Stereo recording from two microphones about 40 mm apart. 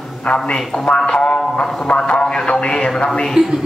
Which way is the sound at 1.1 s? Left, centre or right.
Left.